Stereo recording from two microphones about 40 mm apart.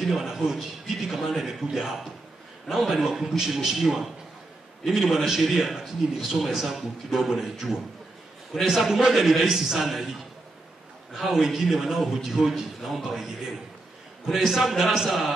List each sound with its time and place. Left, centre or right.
0.0 s a man's voice: centre
6.0 s a man's voice: centre
9.2 s a man's voice: centre
11.1 s a man's voice: centre